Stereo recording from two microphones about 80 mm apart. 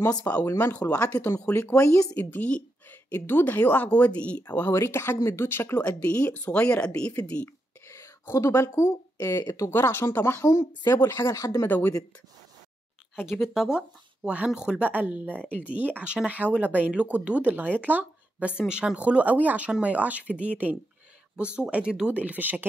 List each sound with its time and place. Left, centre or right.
0.2 s speech: centre
1.0 s speech: left
2.1 s a woman's voice: centre
4.7 s speech: left
6.0 s speech: centre
7.4 s speech: left
9.7 s speech: left
11.6 s speech: left
13.1 s speech: centre
14.9 s speech: centre
18.6 s speech: centre